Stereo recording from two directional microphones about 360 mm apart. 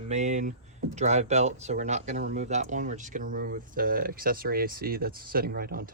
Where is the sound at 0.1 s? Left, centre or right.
Centre.